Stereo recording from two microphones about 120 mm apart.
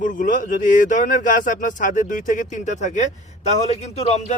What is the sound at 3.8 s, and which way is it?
Speech, 65° left (ahead or behind).